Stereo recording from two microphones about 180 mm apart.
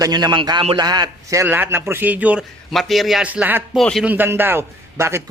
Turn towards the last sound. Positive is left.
turn(degrees=-15)  # may be behind; listen again after turning